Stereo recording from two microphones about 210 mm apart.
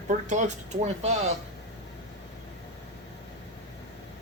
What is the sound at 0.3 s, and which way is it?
Speech, 35° right (ahead or behind).